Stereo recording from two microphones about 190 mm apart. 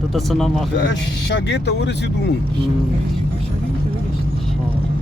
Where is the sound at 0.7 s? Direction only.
65° left (ahead or behind).